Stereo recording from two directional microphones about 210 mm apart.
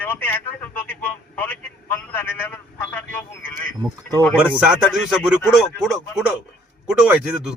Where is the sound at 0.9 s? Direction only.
10° left (ahead or behind).